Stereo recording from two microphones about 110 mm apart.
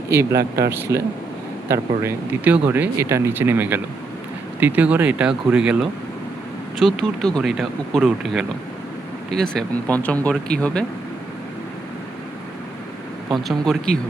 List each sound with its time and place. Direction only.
0.1 s speech: 25° right (ahead or behind)
2.4 s speech: 15° right (ahead or behind)
3.0 s speech: 25° right (ahead or behind); by 5.9 s 10° right (ahead or behind)
6.7 s speech: 5° left (ahead or behind)
13.3 s speech: centre (ahead or behind)